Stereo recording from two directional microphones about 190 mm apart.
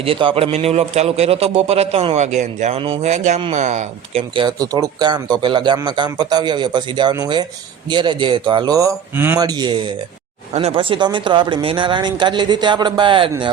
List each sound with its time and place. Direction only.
0.0 s a man's voice: 30° right (ahead or behind)
4.4 s speech: 20° right (ahead or behind)